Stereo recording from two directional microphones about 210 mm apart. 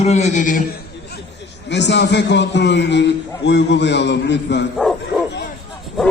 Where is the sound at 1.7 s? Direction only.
55° left (ahead or behind).